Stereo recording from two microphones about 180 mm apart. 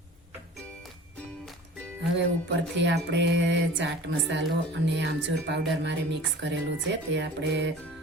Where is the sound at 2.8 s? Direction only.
80° right.